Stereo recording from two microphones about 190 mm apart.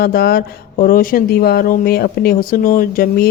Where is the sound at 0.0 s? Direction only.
55° left (ahead or behind).